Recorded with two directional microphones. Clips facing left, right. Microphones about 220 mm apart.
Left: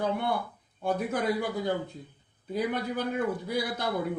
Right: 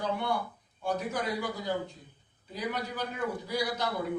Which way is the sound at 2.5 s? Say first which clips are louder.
Left 5 dB; 55° left (ahead or behind).